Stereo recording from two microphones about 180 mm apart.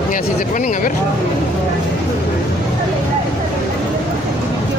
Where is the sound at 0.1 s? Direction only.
45° left (ahead or behind).